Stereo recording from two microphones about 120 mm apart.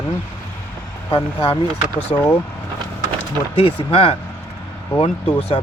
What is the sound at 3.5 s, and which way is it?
Speech, 50° left (ahead or behind).